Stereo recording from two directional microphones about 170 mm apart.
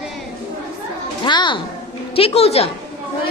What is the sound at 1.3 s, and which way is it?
A woman's voice, 25° left (ahead or behind).